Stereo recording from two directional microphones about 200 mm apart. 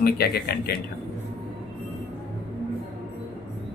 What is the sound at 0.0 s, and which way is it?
Speech, 50° left (ahead or behind).